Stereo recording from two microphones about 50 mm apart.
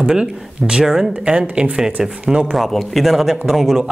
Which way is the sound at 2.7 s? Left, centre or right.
Centre.